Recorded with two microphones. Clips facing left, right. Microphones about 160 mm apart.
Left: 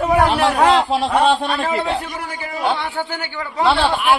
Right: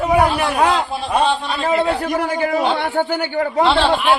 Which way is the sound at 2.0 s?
50° right (ahead or behind).